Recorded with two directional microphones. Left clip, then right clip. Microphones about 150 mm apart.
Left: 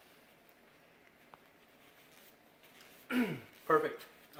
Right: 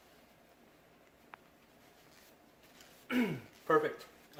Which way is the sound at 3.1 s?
10° right (ahead or behind).